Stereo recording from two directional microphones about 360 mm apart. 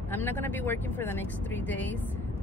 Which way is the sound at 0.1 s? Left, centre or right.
Centre.